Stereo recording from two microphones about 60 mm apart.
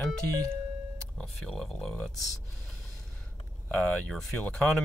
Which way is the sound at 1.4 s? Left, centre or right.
Centre.